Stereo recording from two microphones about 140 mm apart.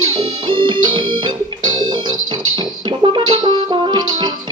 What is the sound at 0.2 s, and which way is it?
Music, 35° right (ahead or behind).